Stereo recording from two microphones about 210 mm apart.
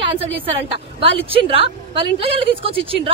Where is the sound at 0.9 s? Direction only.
25° right (ahead or behind).